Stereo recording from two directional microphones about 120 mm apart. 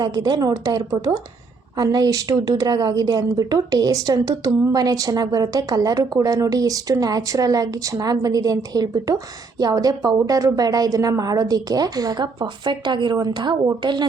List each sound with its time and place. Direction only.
0.0 s a woman's voice: 35° right (ahead or behind)